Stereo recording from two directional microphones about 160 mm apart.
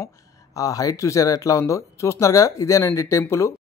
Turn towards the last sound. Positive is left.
turn(degrees=15)  # may be behind; listen again after turning